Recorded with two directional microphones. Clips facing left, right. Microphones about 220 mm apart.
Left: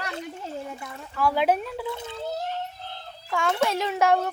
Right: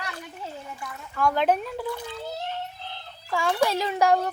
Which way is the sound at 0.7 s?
25° left (ahead or behind).